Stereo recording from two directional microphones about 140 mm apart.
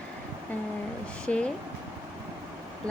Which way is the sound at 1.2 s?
10° left (ahead or behind).